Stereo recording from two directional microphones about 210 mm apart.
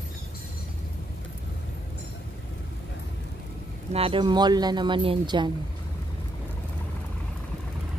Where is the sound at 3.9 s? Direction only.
25° right (ahead or behind).